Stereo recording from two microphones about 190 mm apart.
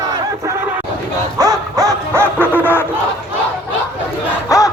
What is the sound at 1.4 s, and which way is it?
Dog, 20° right (ahead or behind).